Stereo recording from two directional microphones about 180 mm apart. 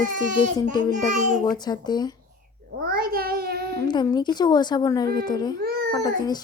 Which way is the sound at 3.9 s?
25° left (ahead or behind).